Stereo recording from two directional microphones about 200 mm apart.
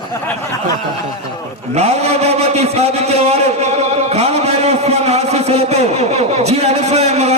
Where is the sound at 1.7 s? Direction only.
30° right (ahead or behind).